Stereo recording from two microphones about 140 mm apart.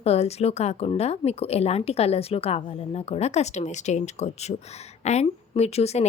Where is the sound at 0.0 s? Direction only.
50° left (ahead or behind).